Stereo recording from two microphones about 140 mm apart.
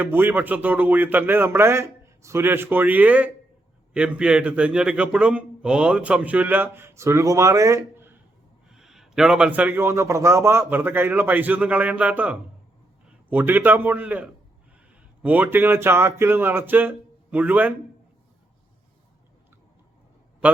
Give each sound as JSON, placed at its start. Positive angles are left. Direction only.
{"t": 0.0, "sound": "a man's voice", "side_deg": -15}
{"t": 8.7, "sound": "a man's voice", "side_deg": -5}